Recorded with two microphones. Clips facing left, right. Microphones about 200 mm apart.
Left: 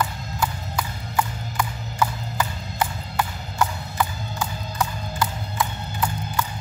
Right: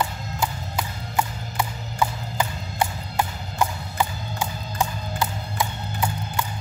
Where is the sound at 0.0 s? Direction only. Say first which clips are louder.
Even; 20° right (ahead or behind).